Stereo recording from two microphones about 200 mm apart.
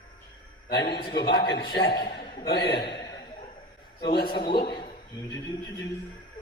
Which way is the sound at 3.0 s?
20° left (ahead or behind).